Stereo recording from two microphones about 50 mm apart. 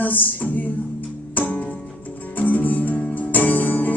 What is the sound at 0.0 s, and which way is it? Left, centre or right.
Music, left.